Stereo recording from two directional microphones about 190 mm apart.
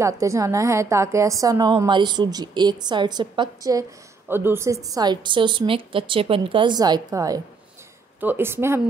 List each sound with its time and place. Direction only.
0.0 s a woman's voice: 15° right (ahead or behind)